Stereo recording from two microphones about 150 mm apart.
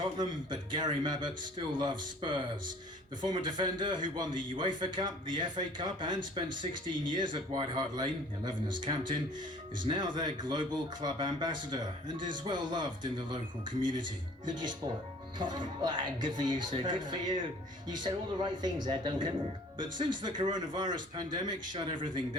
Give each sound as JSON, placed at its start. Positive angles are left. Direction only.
{"t": 0.2, "sound": "speech", "side_deg": -30}
{"t": 15.4, "sound": "speech", "side_deg": -30}